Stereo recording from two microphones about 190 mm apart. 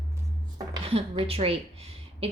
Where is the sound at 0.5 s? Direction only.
30° right (ahead or behind).